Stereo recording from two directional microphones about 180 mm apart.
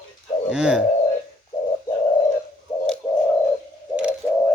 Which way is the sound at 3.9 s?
5° right (ahead or behind).